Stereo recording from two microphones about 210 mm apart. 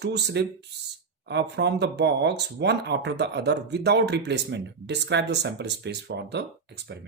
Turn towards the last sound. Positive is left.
turn(degrees=-55)  # may be behind; listen again after turning